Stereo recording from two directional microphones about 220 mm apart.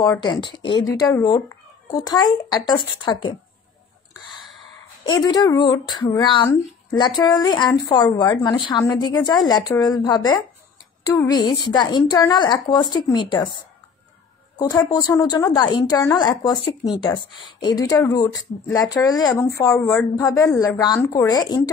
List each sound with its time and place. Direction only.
0.0 s a woman's voice: 20° left (ahead or behind)
5.2 s a woman's voice: 15° left (ahead or behind)
14.6 s a woman's voice: 15° left (ahead or behind)